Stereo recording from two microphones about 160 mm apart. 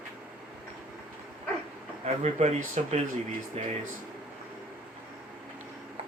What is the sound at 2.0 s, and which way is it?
Speech, 45° right (ahead or behind).